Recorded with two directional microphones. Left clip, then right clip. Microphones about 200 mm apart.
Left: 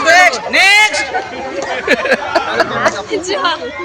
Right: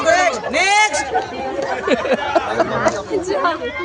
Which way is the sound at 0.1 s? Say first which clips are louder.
Left 7 dB; 60° right (ahead or behind).